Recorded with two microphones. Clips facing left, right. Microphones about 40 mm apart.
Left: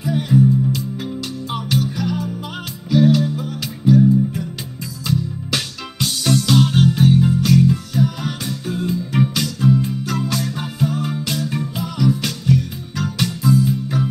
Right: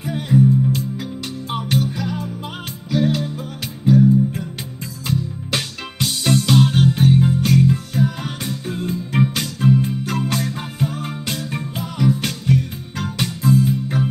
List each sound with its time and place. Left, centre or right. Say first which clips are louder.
0.0 s music: left 1 dB; right
5.0 s music: left 2 dB; right